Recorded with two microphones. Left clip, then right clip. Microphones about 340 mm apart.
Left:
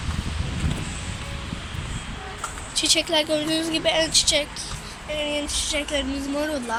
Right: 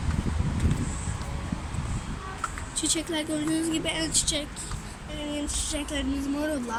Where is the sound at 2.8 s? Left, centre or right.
Centre.